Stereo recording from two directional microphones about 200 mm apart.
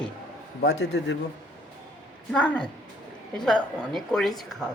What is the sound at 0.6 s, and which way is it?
Speech, 60° left (ahead or behind).